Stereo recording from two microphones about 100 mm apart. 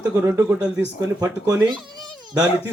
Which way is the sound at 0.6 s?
10° right (ahead or behind).